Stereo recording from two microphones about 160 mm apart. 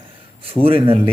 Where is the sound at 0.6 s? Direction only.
35° right (ahead or behind).